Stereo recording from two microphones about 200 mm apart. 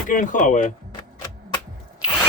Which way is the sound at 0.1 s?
40° left (ahead or behind).